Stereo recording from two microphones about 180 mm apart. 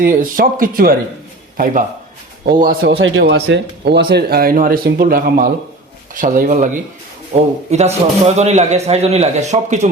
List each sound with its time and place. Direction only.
0.0 s a man's voice: 50° right (ahead or behind)
3.0 s a man's voice: 80° right; by 9.9 s 40° right (ahead or behind)